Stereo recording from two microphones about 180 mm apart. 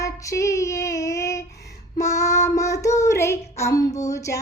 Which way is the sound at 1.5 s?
65° left (ahead or behind).